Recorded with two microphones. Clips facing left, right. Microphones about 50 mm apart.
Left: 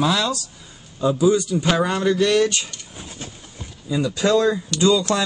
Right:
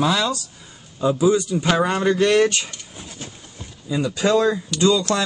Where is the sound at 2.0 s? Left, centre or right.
Right.